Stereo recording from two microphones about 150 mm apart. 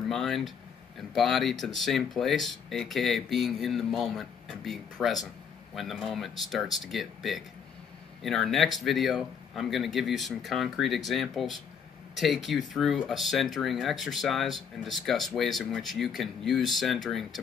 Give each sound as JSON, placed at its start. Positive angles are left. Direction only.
{"t": 0.1, "sound": "speech", "side_deg": 0}